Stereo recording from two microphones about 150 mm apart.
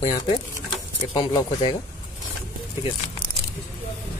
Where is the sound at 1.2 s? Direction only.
30° left (ahead or behind).